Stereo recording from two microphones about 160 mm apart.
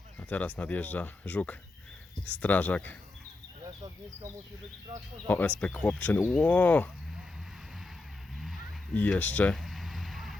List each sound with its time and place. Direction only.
0.2 s speech: 10° left (ahead or behind)
3.6 s speech: 20° right (ahead or behind)
5.5 s speech: 10° left (ahead or behind)
8.4 s vehicle: centre (ahead or behind)